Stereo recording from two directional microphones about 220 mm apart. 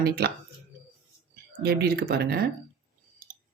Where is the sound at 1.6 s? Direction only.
45° right (ahead or behind).